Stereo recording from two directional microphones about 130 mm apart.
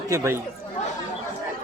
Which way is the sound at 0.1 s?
20° right (ahead or behind).